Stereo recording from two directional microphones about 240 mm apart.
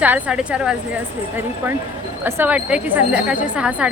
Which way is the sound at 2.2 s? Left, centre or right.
Centre.